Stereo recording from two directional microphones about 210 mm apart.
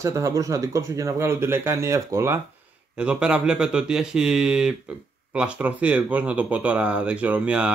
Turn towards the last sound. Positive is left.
turn(degrees=-5)  # may be behind; listen again after turning